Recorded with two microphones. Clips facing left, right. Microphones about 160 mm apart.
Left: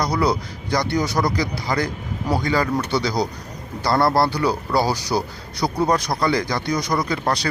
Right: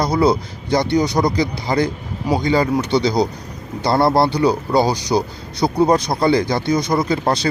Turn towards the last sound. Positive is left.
turn(degrees=-25)  # may be behind; listen again after turning